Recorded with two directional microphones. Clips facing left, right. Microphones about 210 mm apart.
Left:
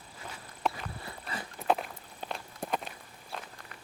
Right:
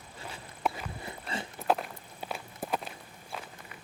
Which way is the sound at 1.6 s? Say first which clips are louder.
Even; centre (ahead or behind).